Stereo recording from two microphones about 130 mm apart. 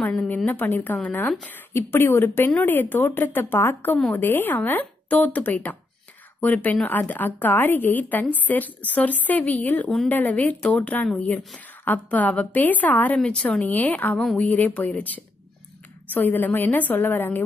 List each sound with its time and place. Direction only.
0.0 s a woman's voice: 10° left (ahead or behind)
9.8 s a woman's voice: 5° left (ahead or behind)